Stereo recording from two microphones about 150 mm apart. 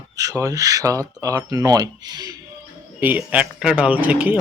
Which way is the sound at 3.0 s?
10° right (ahead or behind).